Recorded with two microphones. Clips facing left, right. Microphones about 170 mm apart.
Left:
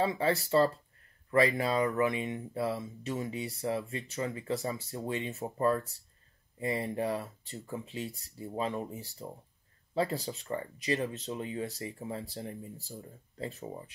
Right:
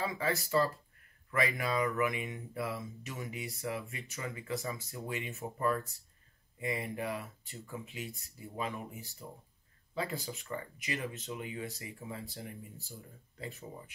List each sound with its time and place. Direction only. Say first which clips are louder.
0.0 s speech: left 5 dB; 30° left (ahead or behind)